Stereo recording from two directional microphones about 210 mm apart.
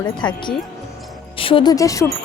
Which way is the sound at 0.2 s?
20° left (ahead or behind).